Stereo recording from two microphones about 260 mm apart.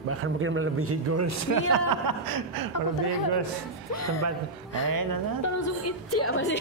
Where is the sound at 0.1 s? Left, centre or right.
Right.